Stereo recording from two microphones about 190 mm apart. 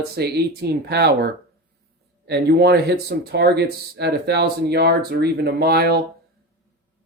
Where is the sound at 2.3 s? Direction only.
60° right (ahead or behind).